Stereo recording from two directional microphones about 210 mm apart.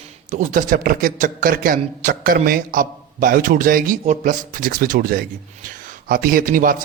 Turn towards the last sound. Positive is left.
turn(degrees=-40)  # may be behind; listen again after turning